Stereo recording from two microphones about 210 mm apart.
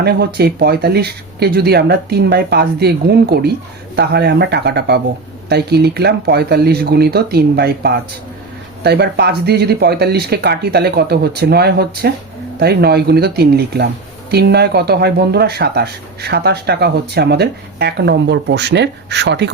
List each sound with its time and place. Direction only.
0.0 s speech: 50° right (ahead or behind)